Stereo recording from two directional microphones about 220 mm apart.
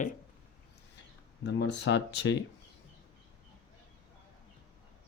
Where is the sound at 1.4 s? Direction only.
55° left (ahead or behind).